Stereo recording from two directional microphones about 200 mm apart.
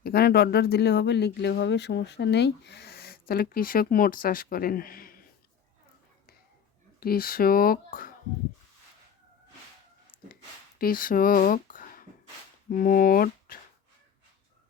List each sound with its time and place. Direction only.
0.0 s speech: 50° left (ahead or behind)
7.0 s speech: 50° left (ahead or behind)
10.8 s speech: 45° left (ahead or behind)